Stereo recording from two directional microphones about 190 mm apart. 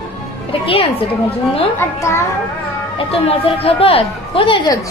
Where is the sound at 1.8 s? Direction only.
15° left (ahead or behind).